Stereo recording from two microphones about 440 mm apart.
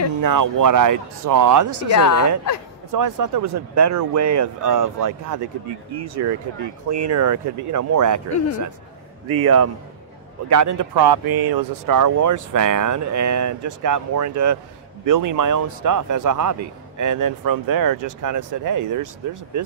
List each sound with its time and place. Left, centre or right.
0.2 s speech: right
2.9 s speech: right
6.6 s speech: right
7.1 s speech: right
11.0 s speech: right